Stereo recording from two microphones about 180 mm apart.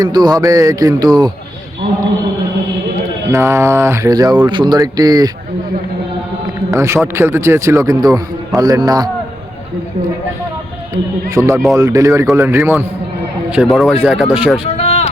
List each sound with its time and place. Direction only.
0.0 s speech: 20° right (ahead or behind)
3.3 s speech: 15° right (ahead or behind)
6.7 s a man's voice: 15° right (ahead or behind)
10.9 s a man's voice: 15° right (ahead or behind)
13.5 s speech: 5° right (ahead or behind)
14.7 s a sound: 35° left (ahead or behind)